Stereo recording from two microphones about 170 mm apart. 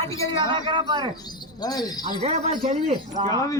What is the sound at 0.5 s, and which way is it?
Speech, 25° right (ahead or behind).